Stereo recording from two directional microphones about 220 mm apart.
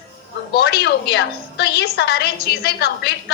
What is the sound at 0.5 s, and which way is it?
A woman's voice, 50° left (ahead or behind).